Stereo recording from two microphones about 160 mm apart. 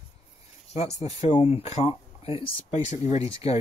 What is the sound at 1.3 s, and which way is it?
Speech, 40° left (ahead or behind).